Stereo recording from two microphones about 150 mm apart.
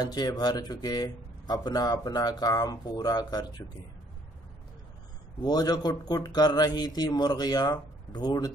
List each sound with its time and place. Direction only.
0.0 s speech: 25° left (ahead or behind)
5.4 s speech: 25° left (ahead or behind)